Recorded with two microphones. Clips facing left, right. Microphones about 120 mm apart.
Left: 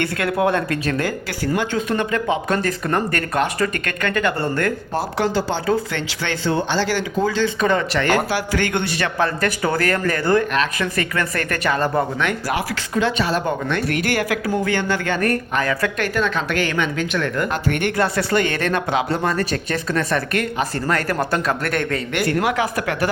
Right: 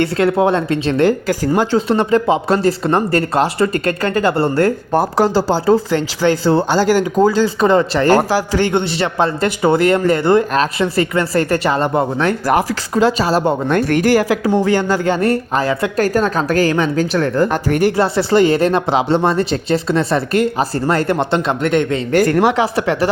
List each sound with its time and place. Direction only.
0.0 s speech: 30° right (ahead or behind)
4.9 s speech: 40° right (ahead or behind)
12.5 s speech: 40° right (ahead or behind); by 22.0 s 20° right (ahead or behind)
22.1 s speech: 40° right (ahead or behind)